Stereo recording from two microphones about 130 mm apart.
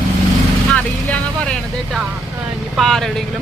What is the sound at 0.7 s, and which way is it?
Vehicle, 10° left (ahead or behind).